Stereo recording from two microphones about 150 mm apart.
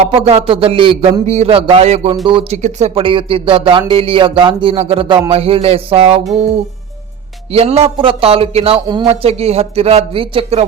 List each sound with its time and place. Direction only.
0.2 s speech: 40° right (ahead or behind)
2.6 s speech: 50° right (ahead or behind)
7.5 s speech: 45° right (ahead or behind)